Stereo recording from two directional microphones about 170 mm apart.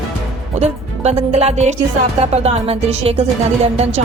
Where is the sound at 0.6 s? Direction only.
40° right (ahead or behind).